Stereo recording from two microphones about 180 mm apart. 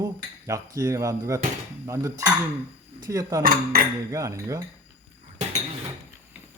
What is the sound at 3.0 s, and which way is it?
Speech, 20° right (ahead or behind).